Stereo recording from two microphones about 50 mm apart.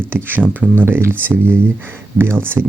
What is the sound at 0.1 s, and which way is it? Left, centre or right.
Speech, right.